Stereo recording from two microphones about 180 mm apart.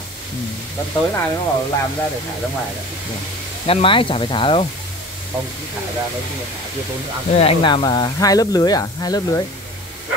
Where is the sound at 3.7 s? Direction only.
30° left (ahead or behind).